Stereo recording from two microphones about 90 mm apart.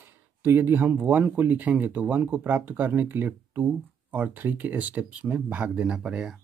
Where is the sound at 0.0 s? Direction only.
25° right (ahead or behind).